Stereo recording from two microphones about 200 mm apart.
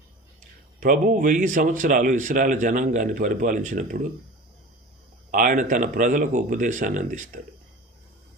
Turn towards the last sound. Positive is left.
turn(degrees=-40)  # may be behind; listen again after turning